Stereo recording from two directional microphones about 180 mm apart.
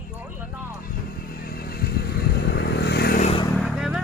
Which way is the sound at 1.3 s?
55° left (ahead or behind).